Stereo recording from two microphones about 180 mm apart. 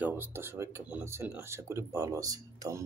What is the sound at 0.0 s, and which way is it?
Speech, 10° right (ahead or behind).